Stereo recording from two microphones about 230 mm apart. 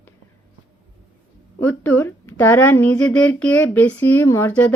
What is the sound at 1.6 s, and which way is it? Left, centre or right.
Speech, centre.